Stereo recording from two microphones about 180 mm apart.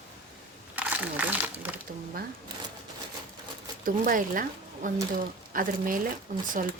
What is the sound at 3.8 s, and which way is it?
Speech, 50° right (ahead or behind).